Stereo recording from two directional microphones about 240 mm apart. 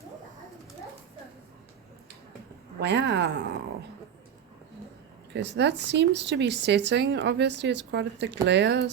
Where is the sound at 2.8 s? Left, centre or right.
Right.